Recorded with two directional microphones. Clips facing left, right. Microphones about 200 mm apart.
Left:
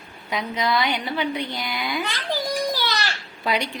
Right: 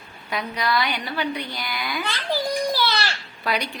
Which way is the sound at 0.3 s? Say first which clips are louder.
Left 1 dB; 20° left (ahead or behind).